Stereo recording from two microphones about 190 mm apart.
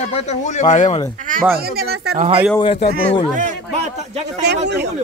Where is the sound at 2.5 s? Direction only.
30° left (ahead or behind).